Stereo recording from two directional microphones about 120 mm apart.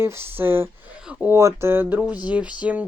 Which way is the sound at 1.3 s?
20° right (ahead or behind).